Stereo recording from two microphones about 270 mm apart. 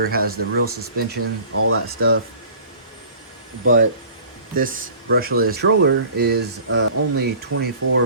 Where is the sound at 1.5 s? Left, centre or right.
Right.